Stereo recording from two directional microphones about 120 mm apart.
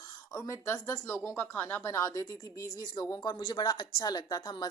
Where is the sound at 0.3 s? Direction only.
25° left (ahead or behind).